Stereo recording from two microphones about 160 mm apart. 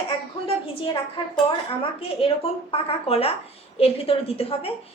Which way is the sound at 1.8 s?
35° left (ahead or behind).